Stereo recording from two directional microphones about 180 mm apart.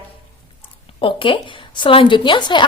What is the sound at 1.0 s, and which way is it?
Speech, 30° left (ahead or behind).